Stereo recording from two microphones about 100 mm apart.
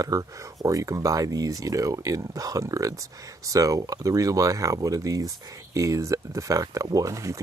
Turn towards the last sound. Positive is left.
turn(degrees=-30)  # may be behind; listen again after turning